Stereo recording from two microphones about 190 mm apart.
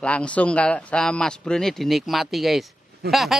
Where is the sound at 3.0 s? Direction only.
55° right (ahead or behind).